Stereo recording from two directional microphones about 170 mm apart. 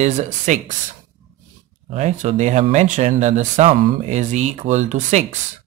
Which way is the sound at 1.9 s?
45° right (ahead or behind).